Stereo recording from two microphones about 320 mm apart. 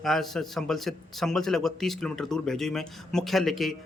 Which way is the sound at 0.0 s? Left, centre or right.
Centre.